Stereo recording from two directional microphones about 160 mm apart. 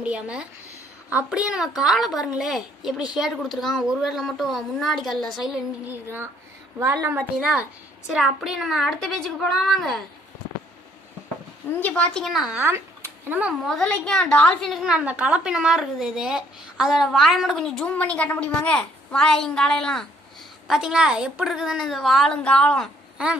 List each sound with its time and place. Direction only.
0.0 s a woman's voice: 5° right (ahead or behind)
7.3 s a woman's voice: 5° right (ahead or behind)
11.8 s a woman's voice: 5° left (ahead or behind)
12.5 s speech: 15° right (ahead or behind)
13.7 s a woman's voice: 5° left (ahead or behind)